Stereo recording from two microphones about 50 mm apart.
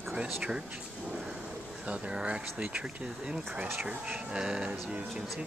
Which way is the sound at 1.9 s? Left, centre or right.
Centre.